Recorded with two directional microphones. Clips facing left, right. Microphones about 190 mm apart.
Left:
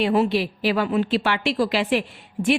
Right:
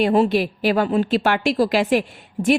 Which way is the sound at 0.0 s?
40° right (ahead or behind).